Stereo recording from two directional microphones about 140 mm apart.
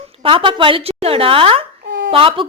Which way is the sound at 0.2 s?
40° right (ahead or behind).